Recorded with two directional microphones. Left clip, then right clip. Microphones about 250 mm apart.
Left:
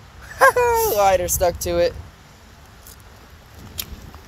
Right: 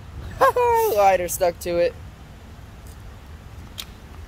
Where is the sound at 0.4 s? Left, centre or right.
Centre.